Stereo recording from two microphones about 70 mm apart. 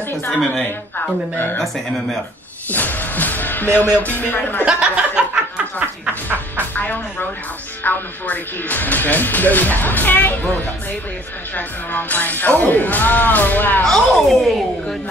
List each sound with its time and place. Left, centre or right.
0.4 s speech: centre
1.3 s speech: left
2.7 s speech: left
4.6 s chuckle: centre
5.8 s a sound: right
6.7 s speech: left
13.8 s a woman's voice: centre